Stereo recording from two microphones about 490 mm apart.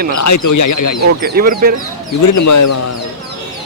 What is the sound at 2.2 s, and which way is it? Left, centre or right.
Speech, left.